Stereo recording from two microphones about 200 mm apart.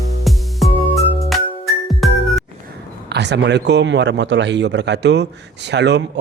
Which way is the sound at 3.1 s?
60° right (ahead or behind).